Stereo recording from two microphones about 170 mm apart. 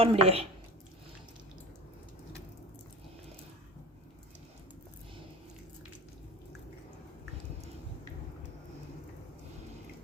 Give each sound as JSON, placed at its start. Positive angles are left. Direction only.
{"t": 0.0, "sound": "a woman's voice", "side_deg": -35}